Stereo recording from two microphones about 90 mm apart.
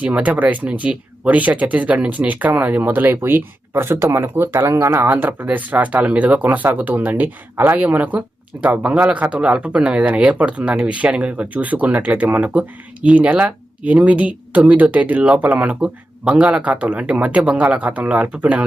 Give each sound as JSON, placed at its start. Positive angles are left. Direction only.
{"t": 0.0, "sound": "speech", "side_deg": -15}
{"t": 5.0, "sound": "speech", "side_deg": -20}